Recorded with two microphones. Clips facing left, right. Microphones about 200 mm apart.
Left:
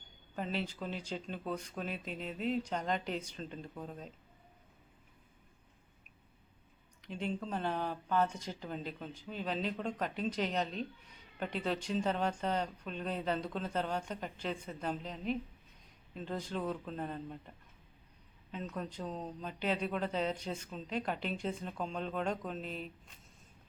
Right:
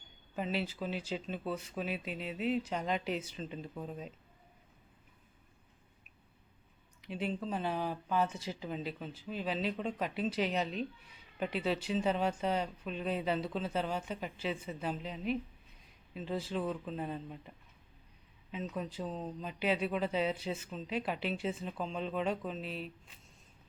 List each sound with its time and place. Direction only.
0.3 s speech: 5° right (ahead or behind)
7.0 s speech: 10° right (ahead or behind)
18.5 s speech: 5° right (ahead or behind)